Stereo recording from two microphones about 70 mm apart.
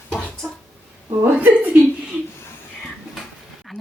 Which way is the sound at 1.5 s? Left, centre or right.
Centre.